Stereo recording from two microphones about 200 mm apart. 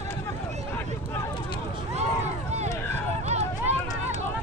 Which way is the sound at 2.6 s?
10° left (ahead or behind).